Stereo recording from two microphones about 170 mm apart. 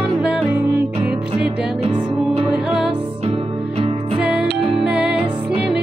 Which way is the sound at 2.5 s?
5° right (ahead or behind).